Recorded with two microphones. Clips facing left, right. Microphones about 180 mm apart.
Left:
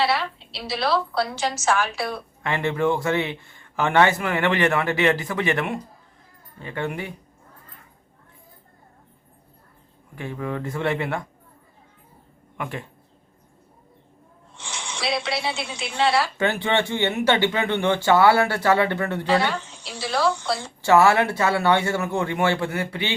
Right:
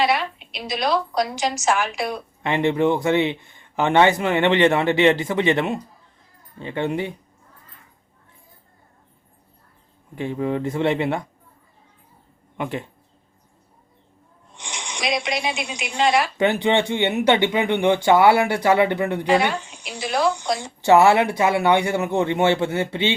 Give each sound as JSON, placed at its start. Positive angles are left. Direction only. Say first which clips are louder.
{"t": 0.0, "sound": "a woman's voice", "louder": "right 2 dB", "side_deg": -15}
{"t": 10.2, "sound": "a woman's voice", "louder": "right 5 dB", "side_deg": -25}
{"t": 12.5, "sound": "a woman's voice", "louder": "right 4 dB", "side_deg": -25}
{"t": 14.5, "sound": "speech", "louder": "right 1 dB", "side_deg": -15}